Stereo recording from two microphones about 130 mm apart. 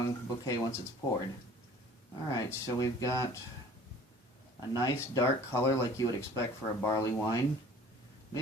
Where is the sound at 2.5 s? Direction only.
25° left (ahead or behind).